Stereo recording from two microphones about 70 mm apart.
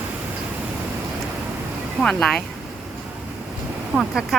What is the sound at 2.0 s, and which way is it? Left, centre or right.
Speech, centre.